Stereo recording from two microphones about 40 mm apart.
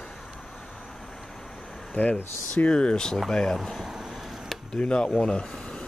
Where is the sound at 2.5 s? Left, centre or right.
Left.